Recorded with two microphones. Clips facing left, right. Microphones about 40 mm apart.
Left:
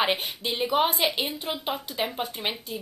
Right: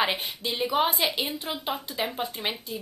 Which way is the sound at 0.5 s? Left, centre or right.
Centre.